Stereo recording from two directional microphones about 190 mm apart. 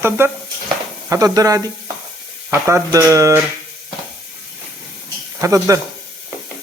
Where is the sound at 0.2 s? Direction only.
15° right (ahead or behind).